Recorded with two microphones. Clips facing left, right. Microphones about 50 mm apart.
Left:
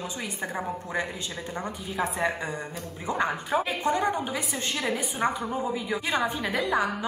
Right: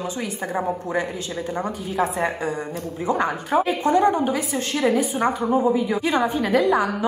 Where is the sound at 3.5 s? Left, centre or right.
Centre.